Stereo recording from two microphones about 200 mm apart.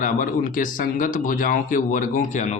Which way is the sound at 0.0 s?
45° left (ahead or behind).